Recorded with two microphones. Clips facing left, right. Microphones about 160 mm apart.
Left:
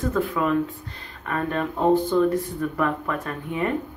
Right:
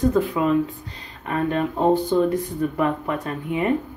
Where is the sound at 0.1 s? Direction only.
20° right (ahead or behind).